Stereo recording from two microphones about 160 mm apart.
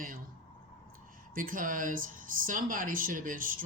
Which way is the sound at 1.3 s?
60° right (ahead or behind).